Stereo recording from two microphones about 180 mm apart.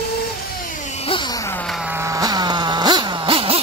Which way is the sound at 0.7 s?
40° left (ahead or behind).